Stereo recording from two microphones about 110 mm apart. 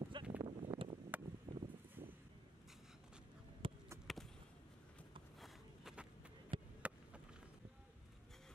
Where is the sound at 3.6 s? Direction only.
50° right (ahead or behind).